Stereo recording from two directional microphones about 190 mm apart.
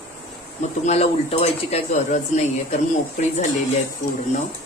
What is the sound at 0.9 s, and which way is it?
Speech, 30° left (ahead or behind).